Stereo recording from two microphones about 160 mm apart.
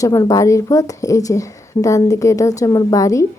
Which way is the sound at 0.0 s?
20° left (ahead or behind).